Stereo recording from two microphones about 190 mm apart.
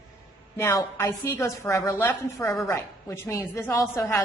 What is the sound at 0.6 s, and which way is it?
A woman's voice, 15° left (ahead or behind).